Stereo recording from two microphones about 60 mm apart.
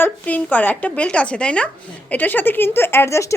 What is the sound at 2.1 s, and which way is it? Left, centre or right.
Speech, left.